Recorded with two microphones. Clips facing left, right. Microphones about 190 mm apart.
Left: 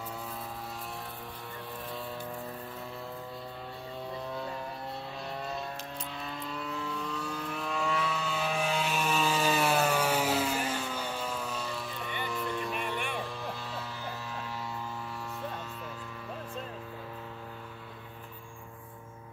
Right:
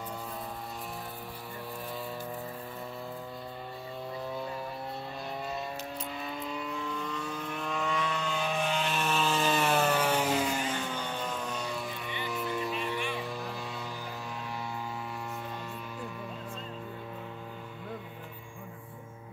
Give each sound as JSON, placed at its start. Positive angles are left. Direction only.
{"t": 6.2, "sound": "vehicle", "side_deg": 0}
{"t": 12.3, "sound": "music", "side_deg": 0}
{"t": 13.2, "sound": "mains hum", "side_deg": 0}